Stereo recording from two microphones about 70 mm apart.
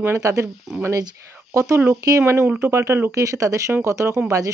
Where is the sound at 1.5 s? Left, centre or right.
Right.